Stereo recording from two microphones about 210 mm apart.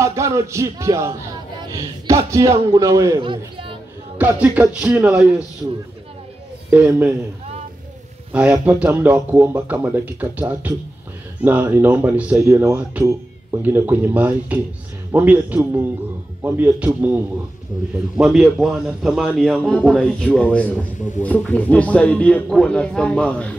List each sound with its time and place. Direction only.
0.0 s a man's voice: 15° right (ahead or behind)
4.2 s speech: 5° right (ahead or behind)
6.7 s speech: 10° right (ahead or behind)
8.3 s a man's voice: 5° right (ahead or behind)